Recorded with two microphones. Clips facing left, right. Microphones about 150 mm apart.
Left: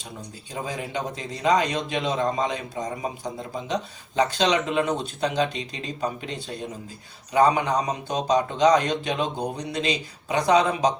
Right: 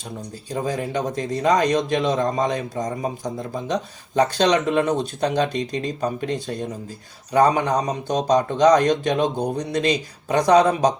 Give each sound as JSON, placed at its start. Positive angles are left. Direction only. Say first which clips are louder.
{"t": 0.5, "sound": "speech", "louder": "right 6 dB", "side_deg": -45}